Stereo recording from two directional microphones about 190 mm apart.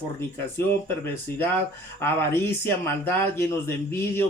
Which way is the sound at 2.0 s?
10° left (ahead or behind).